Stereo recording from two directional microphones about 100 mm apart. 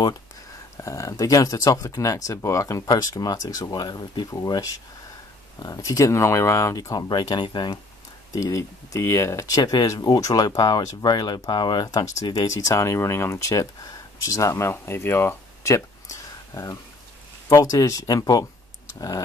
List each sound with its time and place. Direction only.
0.7 s speech: 30° left (ahead or behind); by 4.3 s 45° left (ahead or behind)
4.3 s speech: 35° left (ahead or behind); by 7.8 s 50° left (ahead or behind)
8.4 s speech: 30° left (ahead or behind)
9.6 s speech: 40° left (ahead or behind)